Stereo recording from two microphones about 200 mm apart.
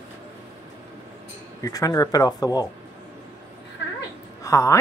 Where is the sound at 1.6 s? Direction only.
15° left (ahead or behind).